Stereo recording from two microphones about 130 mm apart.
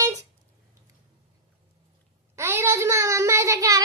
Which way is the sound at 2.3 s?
20° right (ahead or behind).